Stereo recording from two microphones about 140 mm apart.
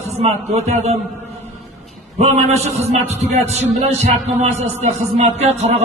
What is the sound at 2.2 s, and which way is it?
A man's voice, 50° right (ahead or behind).